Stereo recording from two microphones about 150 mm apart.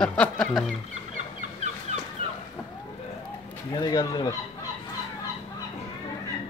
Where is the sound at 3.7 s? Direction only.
25° left (ahead or behind).